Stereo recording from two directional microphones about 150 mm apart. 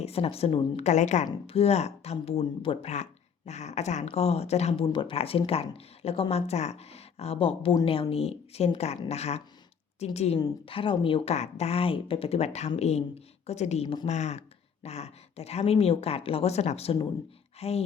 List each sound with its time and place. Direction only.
0.0 s speech: 40° left (ahead or behind)
4.9 s speech: 35° left (ahead or behind)
10.3 s speech: 35° left (ahead or behind)
13.8 s speech: 35° left (ahead or behind)
14.1 s speech: 50° left (ahead or behind)